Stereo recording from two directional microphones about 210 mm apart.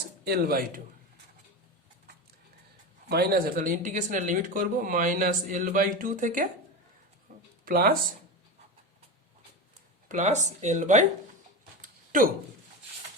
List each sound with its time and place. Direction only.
0.3 s speech: 45° right (ahead or behind)
3.1 s speech: 50° right (ahead or behind)
7.6 s speech: 45° right (ahead or behind)
10.1 s speech: 35° right (ahead or behind)
11.8 s a sound: 40° right (ahead or behind)